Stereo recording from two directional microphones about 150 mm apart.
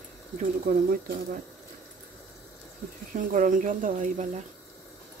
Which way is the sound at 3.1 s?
60° right (ahead or behind).